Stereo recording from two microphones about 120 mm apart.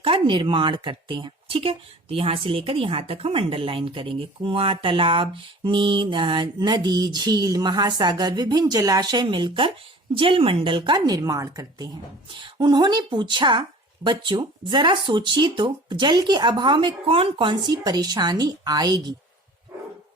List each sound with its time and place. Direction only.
0.0 s speech: 45° right (ahead or behind); by 11.9 s 30° right (ahead or behind)
12.3 s speech: 40° right (ahead or behind)